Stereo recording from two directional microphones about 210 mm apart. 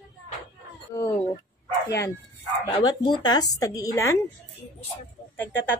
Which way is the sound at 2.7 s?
20° left (ahead or behind).